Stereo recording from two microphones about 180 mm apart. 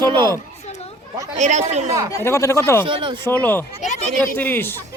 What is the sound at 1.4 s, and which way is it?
Speech, 40° right (ahead or behind).